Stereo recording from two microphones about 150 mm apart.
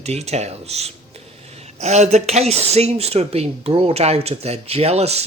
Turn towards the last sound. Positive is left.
turn(degrees=-45)  # may be behind; listen again after turning